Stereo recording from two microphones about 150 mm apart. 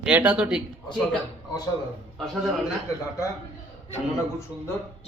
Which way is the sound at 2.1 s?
Centre (ahead or behind).